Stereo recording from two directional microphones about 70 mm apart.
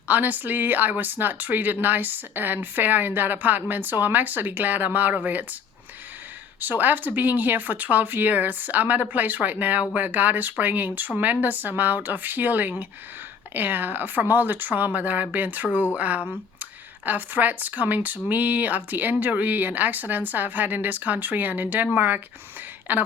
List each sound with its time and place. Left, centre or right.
0.1 s speech: right
6.6 s speech: right